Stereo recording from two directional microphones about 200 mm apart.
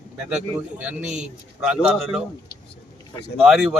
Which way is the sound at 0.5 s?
5° right (ahead or behind).